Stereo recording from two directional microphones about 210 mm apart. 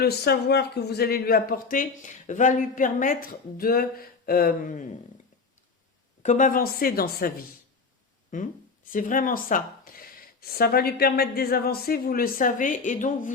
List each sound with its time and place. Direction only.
0.0 s speech: 50° left (ahead or behind)
6.2 s speech: 40° left (ahead or behind)